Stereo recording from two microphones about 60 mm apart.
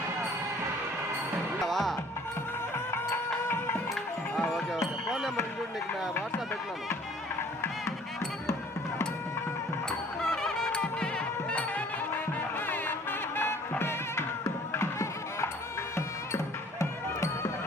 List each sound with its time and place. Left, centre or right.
1.6 s music: centre
4.5 s music: centre
10.2 s music: centre
11.5 s music: left
16.8 s music: left